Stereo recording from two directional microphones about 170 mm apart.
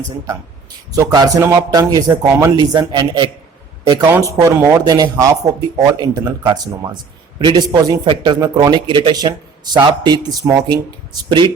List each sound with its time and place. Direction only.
0.9 s speech: 20° right (ahead or behind)